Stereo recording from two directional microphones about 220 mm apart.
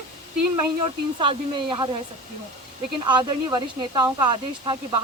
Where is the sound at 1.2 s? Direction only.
20° right (ahead or behind).